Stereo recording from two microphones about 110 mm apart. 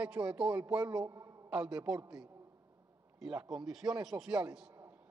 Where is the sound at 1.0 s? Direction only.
25° right (ahead or behind).